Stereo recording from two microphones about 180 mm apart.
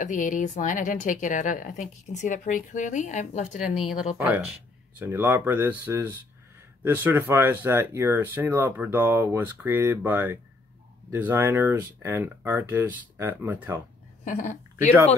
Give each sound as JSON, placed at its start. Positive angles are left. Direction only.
{"t": 0.0, "sound": "speech", "side_deg": 45}
{"t": 3.6, "sound": "speech", "side_deg": -5}
{"t": 14.2, "sound": "speech", "side_deg": 40}